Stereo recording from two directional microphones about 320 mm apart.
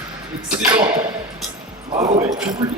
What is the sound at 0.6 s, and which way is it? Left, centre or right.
Speech, centre.